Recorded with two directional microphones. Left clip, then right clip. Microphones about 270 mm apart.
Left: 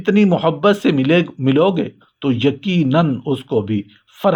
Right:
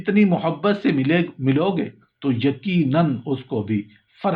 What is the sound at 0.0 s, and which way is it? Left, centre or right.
Speech, left.